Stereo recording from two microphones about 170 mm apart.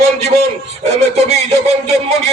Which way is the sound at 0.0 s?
40° right (ahead or behind).